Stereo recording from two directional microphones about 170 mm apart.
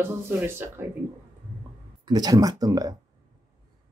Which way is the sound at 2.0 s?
25° right (ahead or behind).